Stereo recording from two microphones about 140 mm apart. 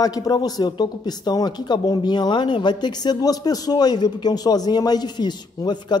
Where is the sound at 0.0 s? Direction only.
25° left (ahead or behind).